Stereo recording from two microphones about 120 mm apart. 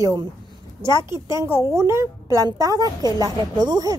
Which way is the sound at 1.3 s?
25° right (ahead or behind).